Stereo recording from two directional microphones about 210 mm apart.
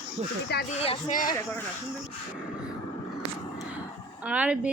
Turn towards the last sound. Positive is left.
turn(degrees=-5)  # may be behind; listen again after turning